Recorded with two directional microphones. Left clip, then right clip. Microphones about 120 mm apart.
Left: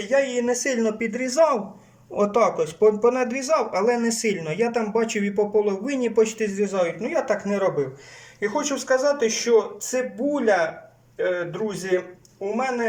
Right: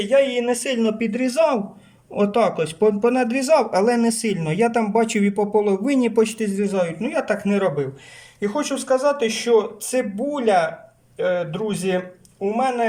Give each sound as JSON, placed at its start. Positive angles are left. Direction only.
{"t": 0.0, "sound": "speech", "side_deg": -15}
{"t": 8.9, "sound": "speech", "side_deg": -10}